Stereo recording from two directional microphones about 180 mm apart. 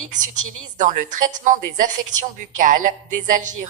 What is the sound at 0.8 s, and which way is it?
A woman's voice, 45° right (ahead or behind).